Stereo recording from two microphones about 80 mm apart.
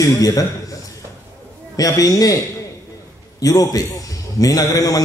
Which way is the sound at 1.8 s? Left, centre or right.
Left.